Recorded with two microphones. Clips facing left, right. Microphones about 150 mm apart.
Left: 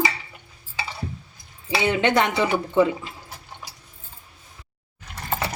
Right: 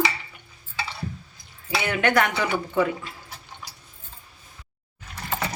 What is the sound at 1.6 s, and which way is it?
Speech, 20° left (ahead or behind).